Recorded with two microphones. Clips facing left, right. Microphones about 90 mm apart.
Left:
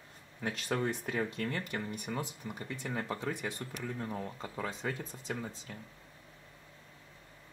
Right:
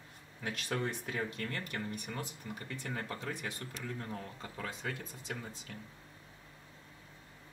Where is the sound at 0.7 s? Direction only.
15° left (ahead or behind).